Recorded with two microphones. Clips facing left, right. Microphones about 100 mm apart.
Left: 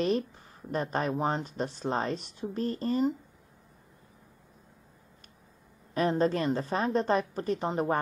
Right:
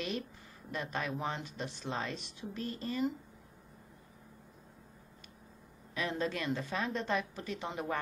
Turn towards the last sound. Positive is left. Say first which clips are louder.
# left 9 dB
turn(degrees=40)  # may be behind; listen again after turning